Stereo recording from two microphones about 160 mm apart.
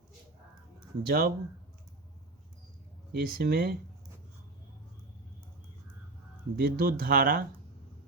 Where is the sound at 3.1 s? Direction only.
75° right (ahead or behind).